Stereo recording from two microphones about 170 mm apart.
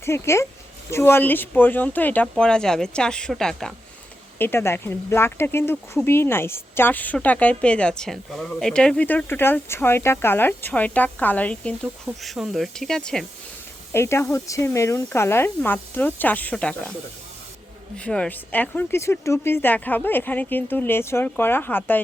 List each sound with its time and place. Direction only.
0.0 s speech: 15° left (ahead or behind)
4.4 s speech: 15° left (ahead or behind)
13.9 s speech: 15° left (ahead or behind)
17.9 s speech: 5° left (ahead or behind)